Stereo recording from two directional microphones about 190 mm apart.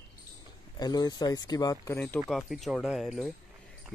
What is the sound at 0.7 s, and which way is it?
Speech, 20° left (ahead or behind).